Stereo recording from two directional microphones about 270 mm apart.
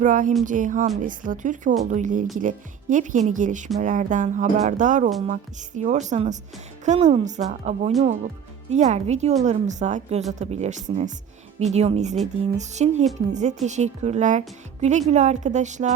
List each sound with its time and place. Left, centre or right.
0.0 s a woman's voice: right